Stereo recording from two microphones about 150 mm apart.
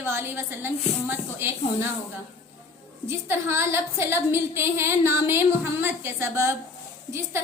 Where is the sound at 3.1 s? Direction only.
15° right (ahead or behind).